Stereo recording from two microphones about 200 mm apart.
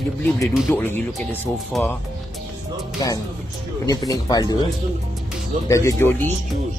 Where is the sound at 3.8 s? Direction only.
20° left (ahead or behind).